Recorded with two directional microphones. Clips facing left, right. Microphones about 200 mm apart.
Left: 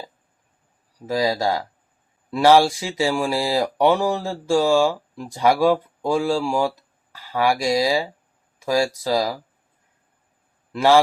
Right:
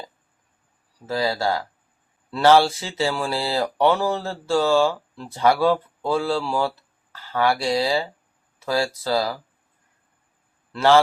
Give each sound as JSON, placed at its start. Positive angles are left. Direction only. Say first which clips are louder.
{"t": 1.0, "sound": "speech", "louder": "left 2 dB", "side_deg": 15}
{"t": 10.7, "sound": "a man's voice", "louder": "left 1 dB", "side_deg": 10}